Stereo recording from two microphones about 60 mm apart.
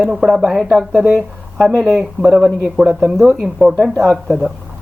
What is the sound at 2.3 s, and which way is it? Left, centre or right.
Speech, right.